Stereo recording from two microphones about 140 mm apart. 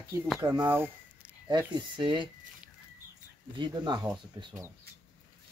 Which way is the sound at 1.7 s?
35° right (ahead or behind).